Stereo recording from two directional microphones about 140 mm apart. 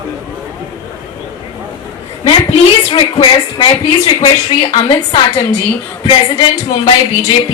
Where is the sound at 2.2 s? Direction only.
40° left (ahead or behind).